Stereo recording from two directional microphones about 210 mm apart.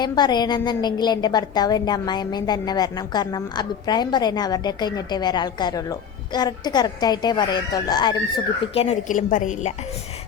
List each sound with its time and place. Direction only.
0.0 s a woman's voice: 20° left (ahead or behind); by 9.7 s 35° left (ahead or behind)